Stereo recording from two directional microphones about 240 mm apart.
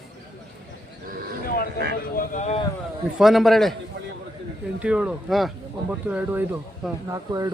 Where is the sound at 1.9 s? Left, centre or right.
Left.